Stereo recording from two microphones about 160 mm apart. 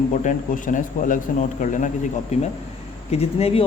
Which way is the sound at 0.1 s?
50° left (ahead or behind).